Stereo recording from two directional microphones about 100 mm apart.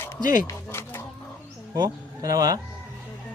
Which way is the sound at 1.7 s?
35° right (ahead or behind).